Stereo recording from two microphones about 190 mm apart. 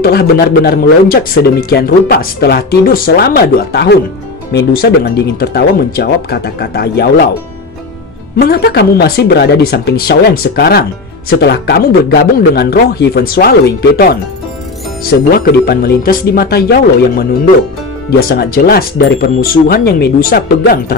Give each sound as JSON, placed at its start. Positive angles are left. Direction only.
{"t": 0.0, "sound": "speech", "side_deg": 55}
{"t": 8.4, "sound": "speech", "side_deg": 55}